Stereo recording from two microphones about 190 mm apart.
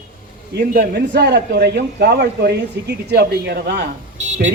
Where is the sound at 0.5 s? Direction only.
55° right (ahead or behind).